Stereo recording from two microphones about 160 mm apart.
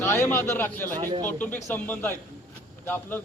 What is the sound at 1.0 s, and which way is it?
Speech, 25° right (ahead or behind).